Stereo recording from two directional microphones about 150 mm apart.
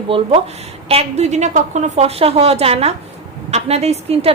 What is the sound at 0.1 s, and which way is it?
A woman's voice, 40° right (ahead or behind).